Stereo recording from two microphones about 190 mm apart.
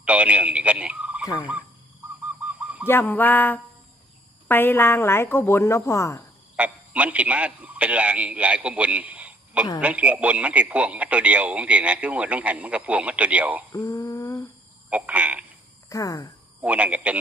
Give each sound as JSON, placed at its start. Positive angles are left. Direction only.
{"t": 0.0, "sound": "speech", "side_deg": -5}
{"t": 2.2, "sound": "bird", "side_deg": -5}
{"t": 2.8, "sound": "a woman's voice", "side_deg": 10}
{"t": 6.6, "sound": "a man's voice", "side_deg": -5}
{"t": 13.7, "sound": "a sound", "side_deg": 20}
{"t": 14.8, "sound": "speech", "side_deg": -5}
{"t": 15.9, "sound": "a woman's voice", "side_deg": 20}
{"t": 16.6, "sound": "speech", "side_deg": -5}